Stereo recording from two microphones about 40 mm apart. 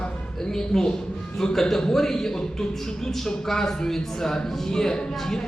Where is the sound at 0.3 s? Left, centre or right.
Centre.